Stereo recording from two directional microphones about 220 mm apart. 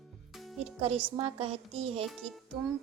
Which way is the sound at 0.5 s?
30° right (ahead or behind).